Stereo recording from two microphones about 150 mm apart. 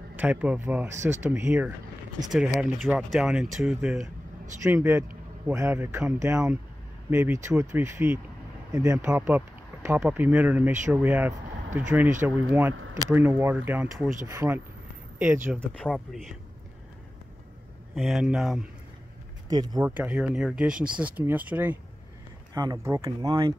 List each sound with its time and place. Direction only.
0.1 s speech: 10° right (ahead or behind)
4.6 s speech: 15° right (ahead or behind)
15.6 s speech: centre (ahead or behind)
17.9 s speech: centre (ahead or behind)
19.5 s speech: 25° right (ahead or behind)
19.8 s speech: 10° right (ahead or behind)
22.5 s speech: 25° right (ahead or behind)